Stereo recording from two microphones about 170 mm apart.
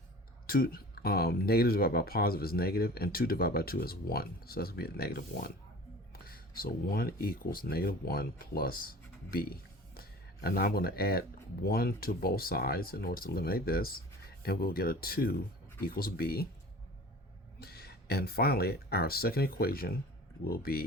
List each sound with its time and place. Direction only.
0.4 s speech: 60° left (ahead or behind)
17.6 s speech: 70° left (ahead or behind)